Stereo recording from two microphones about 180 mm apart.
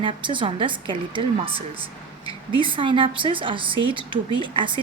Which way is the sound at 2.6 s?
30° right (ahead or behind).